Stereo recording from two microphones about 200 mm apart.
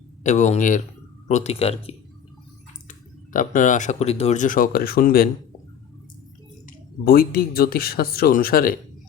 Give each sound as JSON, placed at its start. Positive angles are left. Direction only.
{"t": 0.2, "sound": "speech", "side_deg": 35}
{"t": 3.3, "sound": "speech", "side_deg": 40}
{"t": 6.7, "sound": "speech", "side_deg": 45}